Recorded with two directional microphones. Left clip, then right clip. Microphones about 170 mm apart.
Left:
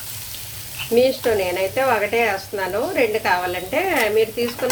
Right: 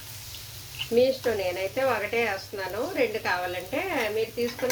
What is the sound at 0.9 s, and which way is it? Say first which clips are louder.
Speech: left 6 dB; 15° left (ahead or behind).